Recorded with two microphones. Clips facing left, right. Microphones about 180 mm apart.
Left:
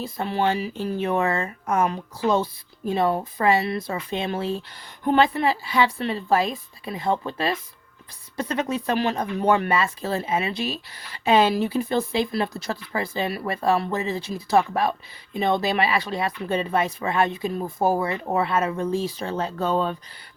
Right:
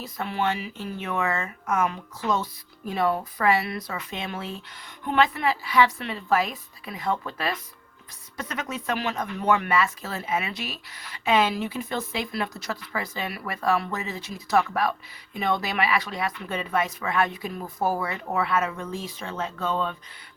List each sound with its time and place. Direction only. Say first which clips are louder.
0.0 s speech: left 4 dB; 30° left (ahead or behind)